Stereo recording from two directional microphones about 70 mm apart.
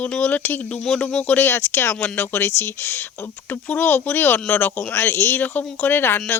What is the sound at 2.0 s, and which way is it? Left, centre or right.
A man's voice, left.